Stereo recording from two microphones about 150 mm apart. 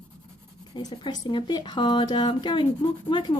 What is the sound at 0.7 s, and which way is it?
Speech, 25° left (ahead or behind).